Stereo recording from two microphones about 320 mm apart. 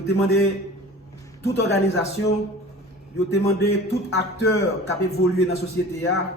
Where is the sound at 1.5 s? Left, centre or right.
Left.